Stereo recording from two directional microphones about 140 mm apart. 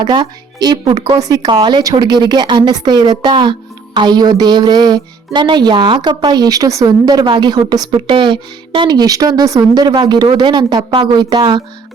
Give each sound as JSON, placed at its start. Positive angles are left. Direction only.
{"t": 0.0, "sound": "speech", "side_deg": -35}